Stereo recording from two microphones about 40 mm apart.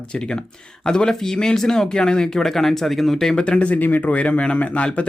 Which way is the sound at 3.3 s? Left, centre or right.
Left.